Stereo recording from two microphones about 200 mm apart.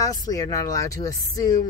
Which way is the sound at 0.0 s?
20° left (ahead or behind).